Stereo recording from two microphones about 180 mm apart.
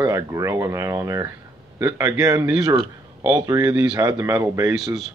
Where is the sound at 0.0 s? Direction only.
15° right (ahead or behind).